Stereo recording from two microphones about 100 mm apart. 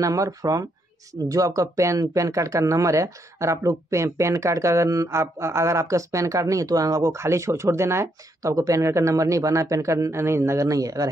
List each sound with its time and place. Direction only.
0.0 s speech: 35° right (ahead or behind)